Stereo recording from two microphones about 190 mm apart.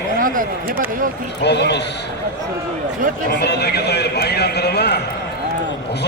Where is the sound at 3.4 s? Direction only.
60° left (ahead or behind).